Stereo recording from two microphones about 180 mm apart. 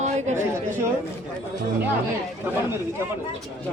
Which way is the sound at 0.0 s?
40° right (ahead or behind).